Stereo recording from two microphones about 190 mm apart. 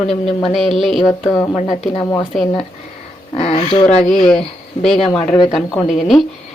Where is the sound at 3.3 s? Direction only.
35° left (ahead or behind).